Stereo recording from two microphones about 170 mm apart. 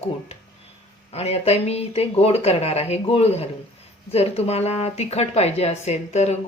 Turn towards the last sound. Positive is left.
turn(degrees=40)  # may be behind; listen again after turning